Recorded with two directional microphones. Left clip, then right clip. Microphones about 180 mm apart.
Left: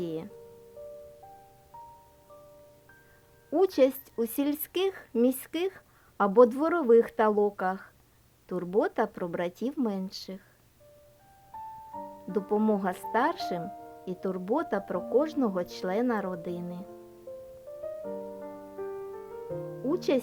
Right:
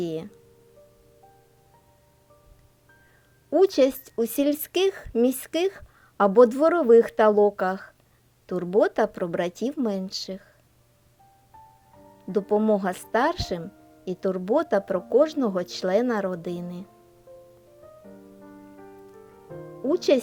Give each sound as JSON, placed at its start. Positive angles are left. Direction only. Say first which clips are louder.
{"t": 0.0, "sound": "speech", "louder": "right 5 dB", "side_deg": -20}
{"t": 3.5, "sound": "speech", "louder": "right 4 dB", "side_deg": -15}
{"t": 12.3, "sound": "speech", "louder": "right 6 dB", "side_deg": -15}
{"t": 19.9, "sound": "speech", "louder": "right 7 dB", "side_deg": -15}